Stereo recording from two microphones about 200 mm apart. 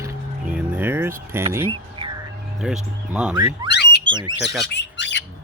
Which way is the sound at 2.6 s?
Centre (ahead or behind).